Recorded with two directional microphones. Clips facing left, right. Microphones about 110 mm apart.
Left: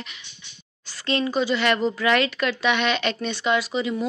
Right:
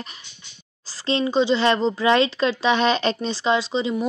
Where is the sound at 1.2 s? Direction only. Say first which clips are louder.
Right 4 dB; 25° right (ahead or behind).